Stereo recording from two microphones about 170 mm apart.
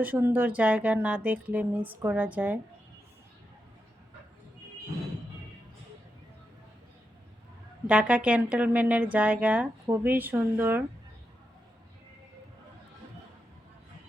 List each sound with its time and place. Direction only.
0.0 s a woman's voice: 10° right (ahead or behind)
7.9 s a woman's voice: 10° right (ahead or behind)